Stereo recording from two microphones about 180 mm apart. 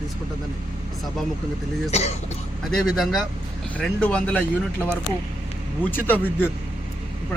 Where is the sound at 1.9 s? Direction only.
35° left (ahead or behind).